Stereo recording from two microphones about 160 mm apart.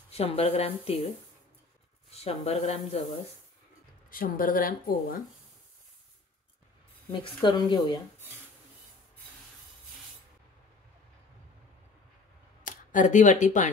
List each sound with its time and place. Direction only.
0.2 s a woman's voice: 40° left (ahead or behind)
2.1 s a woman's voice: 40° left (ahead or behind)
4.1 s speech: 60° left (ahead or behind)
7.1 s speech: 30° left (ahead or behind)
12.6 s speech: 50° left (ahead or behind)